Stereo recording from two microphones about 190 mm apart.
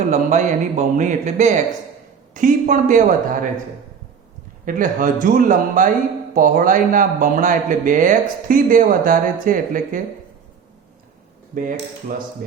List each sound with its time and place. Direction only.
0.1 s speech: 40° right (ahead or behind)
4.6 s speech: 45° right (ahead or behind)
11.5 s speech: 45° right (ahead or behind)